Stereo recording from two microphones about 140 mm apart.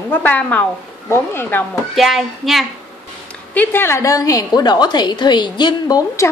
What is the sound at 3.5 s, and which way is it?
A woman's voice, 15° left (ahead or behind).